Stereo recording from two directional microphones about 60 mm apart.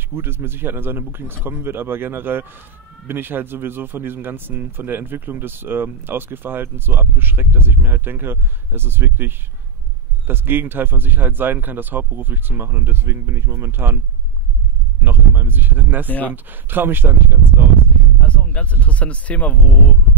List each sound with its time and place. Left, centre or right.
0.1 s speech: right
15.0 s speech: right
16.1 s speech: left
16.4 s speech: right
18.2 s speech: left